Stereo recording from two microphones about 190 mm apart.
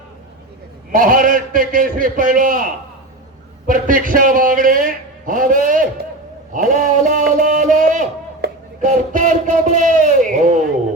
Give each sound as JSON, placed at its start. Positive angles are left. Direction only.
{"t": 0.9, "sound": "a man's voice", "side_deg": -45}
{"t": 3.7, "sound": "a man's voice", "side_deg": -45}
{"t": 6.5, "sound": "a sound", "side_deg": -45}